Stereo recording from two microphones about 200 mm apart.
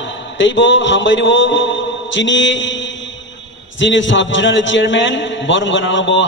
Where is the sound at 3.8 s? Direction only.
65° left (ahead or behind).